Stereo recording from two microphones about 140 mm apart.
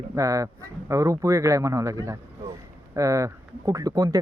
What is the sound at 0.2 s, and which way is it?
Speech, 25° right (ahead or behind).